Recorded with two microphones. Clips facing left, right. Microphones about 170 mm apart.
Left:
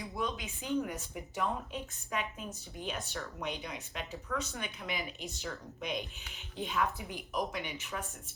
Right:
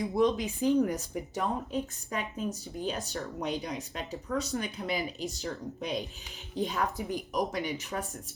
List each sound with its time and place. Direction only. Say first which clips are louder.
0.2 s speech: right 12 dB; 35° right (ahead or behind)